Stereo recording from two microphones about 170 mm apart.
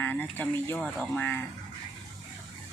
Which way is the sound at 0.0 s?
10° left (ahead or behind).